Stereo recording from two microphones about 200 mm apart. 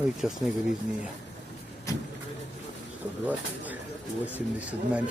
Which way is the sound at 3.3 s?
10° right (ahead or behind).